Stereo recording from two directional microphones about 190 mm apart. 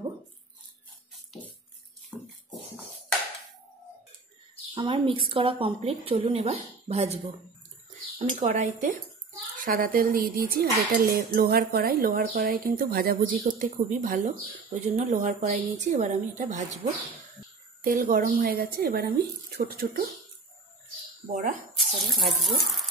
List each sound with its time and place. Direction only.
2.1 s music: 5° left (ahead or behind)
4.7 s a woman's voice: 25° right (ahead or behind)
17.8 s speech: 45° right (ahead or behind)
21.3 s speech: 40° right (ahead or behind)
21.7 s speech: centre (ahead or behind)